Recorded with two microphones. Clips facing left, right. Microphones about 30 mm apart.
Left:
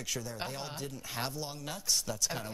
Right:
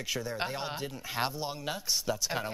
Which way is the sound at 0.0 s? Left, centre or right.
Right.